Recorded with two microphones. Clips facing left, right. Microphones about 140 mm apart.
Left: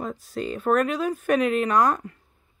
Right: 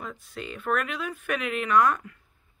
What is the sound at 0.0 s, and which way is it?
Speech, 35° left (ahead or behind).